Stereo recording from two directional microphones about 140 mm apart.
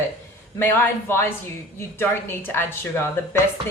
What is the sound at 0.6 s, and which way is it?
A woman's voice, 15° left (ahead or behind).